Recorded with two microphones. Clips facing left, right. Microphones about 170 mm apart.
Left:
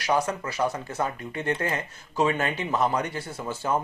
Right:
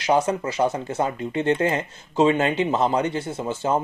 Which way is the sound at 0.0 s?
25° right (ahead or behind).